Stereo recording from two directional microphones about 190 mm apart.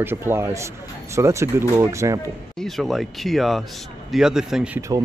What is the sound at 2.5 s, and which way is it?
Speech, centre (ahead or behind).